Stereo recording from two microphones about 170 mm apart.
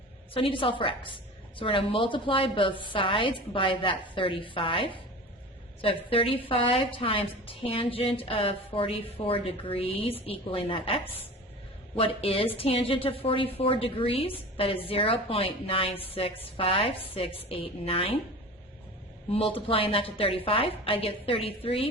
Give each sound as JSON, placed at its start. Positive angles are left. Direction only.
{"t": 0.3, "sound": "a woman's voice", "side_deg": 30}
{"t": 19.3, "sound": "a woman's voice", "side_deg": 35}